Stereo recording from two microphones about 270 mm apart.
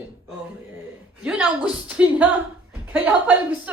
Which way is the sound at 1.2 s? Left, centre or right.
Centre.